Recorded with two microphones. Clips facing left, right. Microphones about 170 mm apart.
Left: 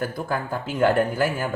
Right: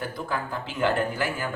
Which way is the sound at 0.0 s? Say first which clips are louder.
Left 4 dB; 45° left (ahead or behind).